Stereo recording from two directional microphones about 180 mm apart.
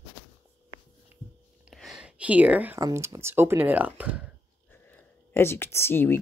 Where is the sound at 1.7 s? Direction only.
Centre (ahead or behind).